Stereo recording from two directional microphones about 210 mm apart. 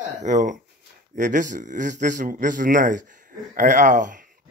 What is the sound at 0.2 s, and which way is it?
A man's voice, 35° right (ahead or behind).